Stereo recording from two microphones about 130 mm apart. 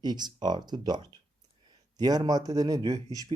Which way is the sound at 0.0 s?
35° right (ahead or behind).